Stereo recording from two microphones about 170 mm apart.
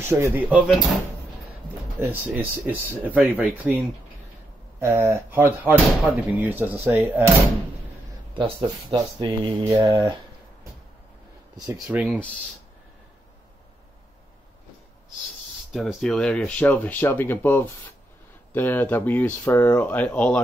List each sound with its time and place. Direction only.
0.0 s speech: 15° right (ahead or behind)
2.0 s speech: 10° right (ahead or behind)
8.4 s speech: 30° right (ahead or behind)
11.9 s speech: 10° right (ahead or behind)
15.7 s speech: centre (ahead or behind)